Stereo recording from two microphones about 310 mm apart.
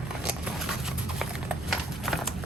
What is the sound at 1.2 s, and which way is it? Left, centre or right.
Horse, centre.